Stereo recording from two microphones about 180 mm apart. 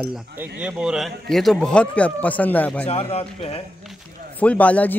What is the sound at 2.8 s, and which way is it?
Speech, 35° left (ahead or behind).